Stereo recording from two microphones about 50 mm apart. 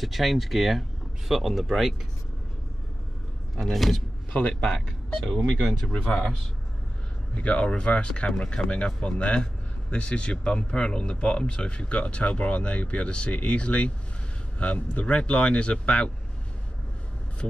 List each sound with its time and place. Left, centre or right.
0.0 s speech: centre
3.5 s speech: centre
4.3 s a man's voice: left
4.6 s speech: centre
5.9 s speech: centre
7.3 s speech: left
8.6 s speech: left